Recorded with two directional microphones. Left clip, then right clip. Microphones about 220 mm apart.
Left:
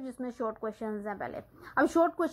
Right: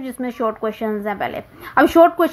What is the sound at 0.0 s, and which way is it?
A woman's voice, 30° right (ahead or behind).